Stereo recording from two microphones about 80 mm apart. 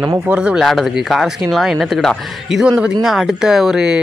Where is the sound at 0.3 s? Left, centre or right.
Centre.